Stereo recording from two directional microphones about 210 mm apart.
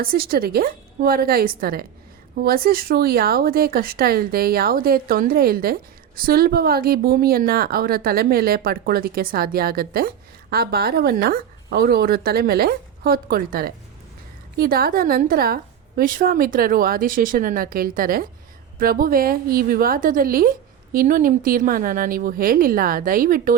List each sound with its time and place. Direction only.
0.0 s speech: 45° right (ahead or behind)